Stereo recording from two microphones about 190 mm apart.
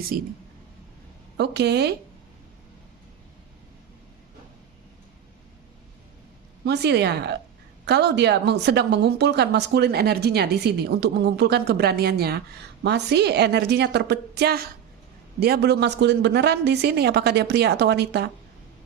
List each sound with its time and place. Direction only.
0.1 s speech: 50° right (ahead or behind)
1.4 s a woman's voice: 60° right (ahead or behind)
6.7 s a woman's voice: 60° right (ahead or behind)